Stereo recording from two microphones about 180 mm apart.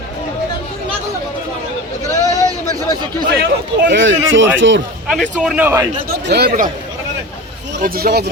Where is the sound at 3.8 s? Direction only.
85° right.